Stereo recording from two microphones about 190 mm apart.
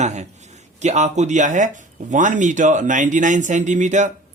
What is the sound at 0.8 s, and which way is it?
A man's voice, 35° right (ahead or behind).